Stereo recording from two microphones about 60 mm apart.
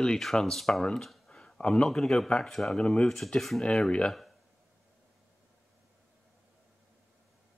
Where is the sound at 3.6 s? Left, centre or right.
Centre.